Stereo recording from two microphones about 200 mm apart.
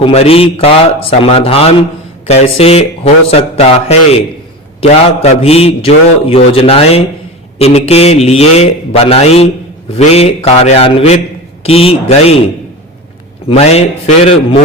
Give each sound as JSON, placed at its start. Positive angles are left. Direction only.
{"t": 0.0, "sound": "a man's voice", "side_deg": 30}
{"t": 13.5, "sound": "speech", "side_deg": 30}